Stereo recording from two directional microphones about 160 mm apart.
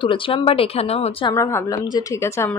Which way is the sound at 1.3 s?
15° left (ahead or behind).